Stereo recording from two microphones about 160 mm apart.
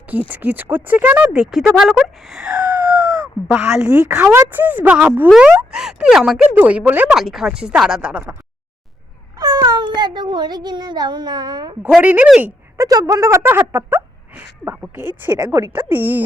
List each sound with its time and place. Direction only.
0.3 s speech: 10° right (ahead or behind)
9.4 s speech: 25° right (ahead or behind)
11.8 s speech: 10° right (ahead or behind)